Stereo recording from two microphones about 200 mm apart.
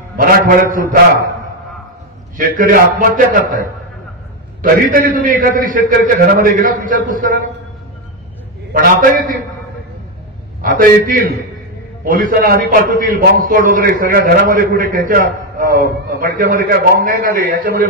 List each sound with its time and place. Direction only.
0.2 s a man's voice: 45° right (ahead or behind)
2.3 s a man's voice: 45° right (ahead or behind)
8.7 s a man's voice: 45° right (ahead or behind)
10.6 s a man's voice: 45° right (ahead or behind)